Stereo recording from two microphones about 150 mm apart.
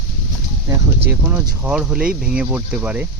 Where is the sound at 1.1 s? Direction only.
10° right (ahead or behind).